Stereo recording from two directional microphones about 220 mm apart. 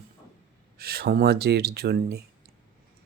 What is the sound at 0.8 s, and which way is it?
Speech, 45° right (ahead or behind).